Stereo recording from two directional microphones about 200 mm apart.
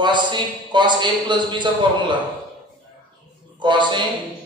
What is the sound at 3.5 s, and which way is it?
Speech, 25° right (ahead or behind).